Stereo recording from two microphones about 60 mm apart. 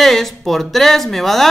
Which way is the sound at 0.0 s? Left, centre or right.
Centre.